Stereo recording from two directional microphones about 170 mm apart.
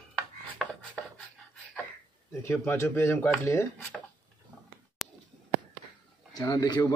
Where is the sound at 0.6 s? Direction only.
5° left (ahead or behind).